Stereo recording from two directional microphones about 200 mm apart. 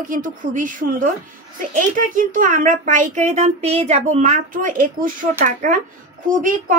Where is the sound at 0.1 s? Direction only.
40° right (ahead or behind).